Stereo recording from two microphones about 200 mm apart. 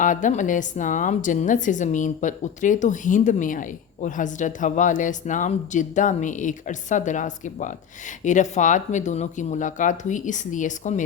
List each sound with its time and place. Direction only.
0.0 s a woman's voice: 40° left (ahead or behind)